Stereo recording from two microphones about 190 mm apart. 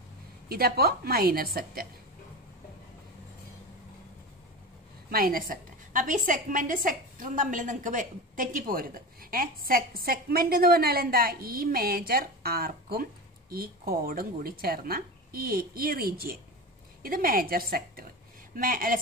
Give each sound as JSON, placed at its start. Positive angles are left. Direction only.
{"t": 0.5, "sound": "a woman's voice", "side_deg": -55}
{"t": 5.1, "sound": "a woman's voice", "side_deg": -50}